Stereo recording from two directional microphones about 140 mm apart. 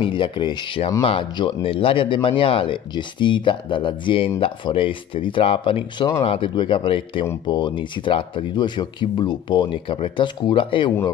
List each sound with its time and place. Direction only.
0.0 s speech: 35° left (ahead or behind)